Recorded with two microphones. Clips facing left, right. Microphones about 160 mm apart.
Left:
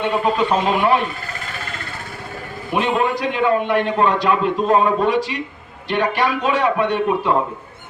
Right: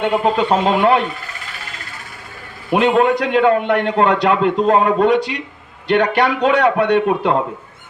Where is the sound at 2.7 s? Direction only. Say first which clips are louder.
Right 5 dB; 65° right (ahead or behind).